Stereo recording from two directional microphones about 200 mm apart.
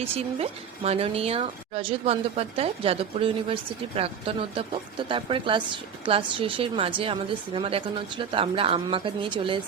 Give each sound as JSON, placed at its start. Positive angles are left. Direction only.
{"t": 0.0, "sound": "a woman's voice", "side_deg": -30}